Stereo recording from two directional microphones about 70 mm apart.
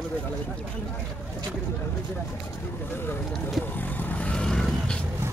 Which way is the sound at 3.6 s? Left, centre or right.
Left.